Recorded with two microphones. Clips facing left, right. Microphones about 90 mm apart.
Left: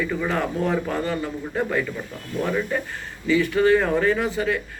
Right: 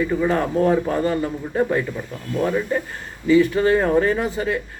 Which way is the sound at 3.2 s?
35° right (ahead or behind).